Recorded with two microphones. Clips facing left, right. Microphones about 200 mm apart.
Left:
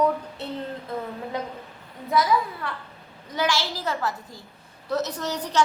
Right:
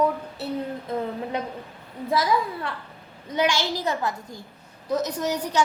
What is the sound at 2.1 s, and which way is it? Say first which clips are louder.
A woman's voice: left 1 dB; 30° right (ahead or behind).